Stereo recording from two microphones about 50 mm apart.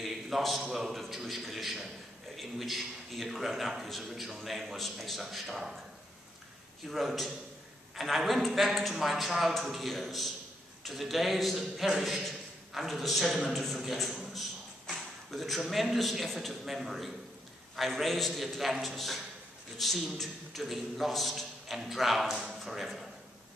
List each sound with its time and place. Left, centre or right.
0.0 s a man's voice: centre
6.9 s a man's voice: centre